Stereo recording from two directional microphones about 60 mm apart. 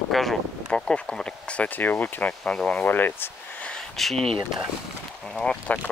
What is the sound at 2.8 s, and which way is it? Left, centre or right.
Speech, left.